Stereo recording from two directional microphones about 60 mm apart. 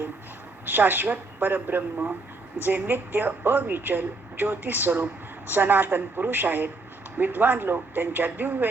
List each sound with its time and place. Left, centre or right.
0.6 s a woman's voice: right